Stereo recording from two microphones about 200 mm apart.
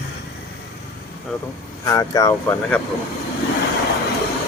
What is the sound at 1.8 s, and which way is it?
Speech, 15° left (ahead or behind).